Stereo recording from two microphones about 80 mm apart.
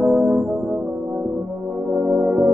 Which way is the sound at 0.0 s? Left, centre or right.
Right.